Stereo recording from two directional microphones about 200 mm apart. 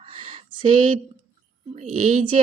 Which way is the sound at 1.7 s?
35° right (ahead or behind).